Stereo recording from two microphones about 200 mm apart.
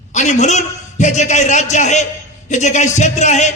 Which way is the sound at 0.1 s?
35° left (ahead or behind).